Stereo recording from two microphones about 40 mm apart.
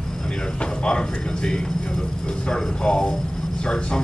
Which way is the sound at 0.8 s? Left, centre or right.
Left.